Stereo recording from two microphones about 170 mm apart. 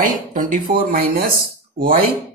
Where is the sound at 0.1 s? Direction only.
55° right (ahead or behind).